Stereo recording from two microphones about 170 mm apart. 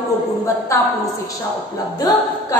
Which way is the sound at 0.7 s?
15° left (ahead or behind).